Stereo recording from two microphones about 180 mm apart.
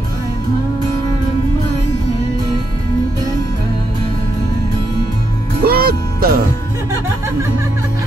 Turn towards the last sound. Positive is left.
turn(degrees=-55)  # may be behind; listen again after turning